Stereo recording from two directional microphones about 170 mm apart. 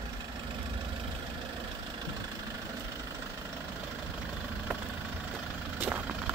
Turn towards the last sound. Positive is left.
turn(degrees=-10)  # may be behind; listen again after turning